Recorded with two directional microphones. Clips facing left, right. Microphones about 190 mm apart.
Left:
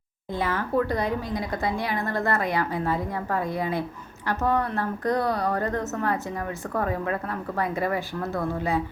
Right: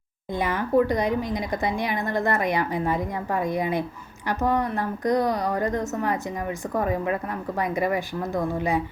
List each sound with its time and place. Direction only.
0.3 s speech: 15° right (ahead or behind)